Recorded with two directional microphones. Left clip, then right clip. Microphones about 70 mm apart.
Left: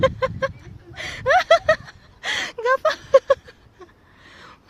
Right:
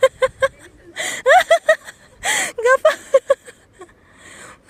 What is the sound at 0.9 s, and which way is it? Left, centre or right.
Gasp, right.